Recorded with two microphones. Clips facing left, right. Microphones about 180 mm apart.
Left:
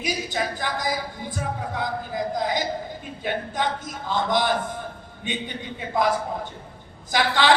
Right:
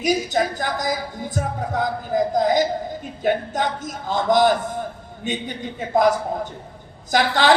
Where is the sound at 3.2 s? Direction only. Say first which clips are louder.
Right 5 dB; 45° right (ahead or behind).